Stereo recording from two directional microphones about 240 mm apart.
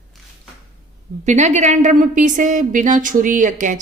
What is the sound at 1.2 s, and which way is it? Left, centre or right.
A woman's voice, right.